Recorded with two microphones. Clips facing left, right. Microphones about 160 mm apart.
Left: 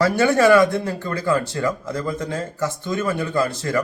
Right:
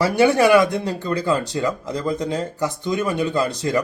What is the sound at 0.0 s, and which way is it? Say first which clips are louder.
Speech: even; 15° right (ahead or behind).